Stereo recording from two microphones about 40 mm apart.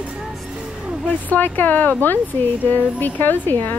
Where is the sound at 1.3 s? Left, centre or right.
Left.